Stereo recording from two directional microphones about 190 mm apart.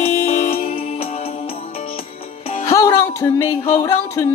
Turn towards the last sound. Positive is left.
turn(degrees=15)  # may be behind; listen again after turning